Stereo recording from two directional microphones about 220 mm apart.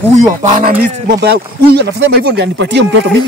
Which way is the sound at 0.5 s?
40° right (ahead or behind).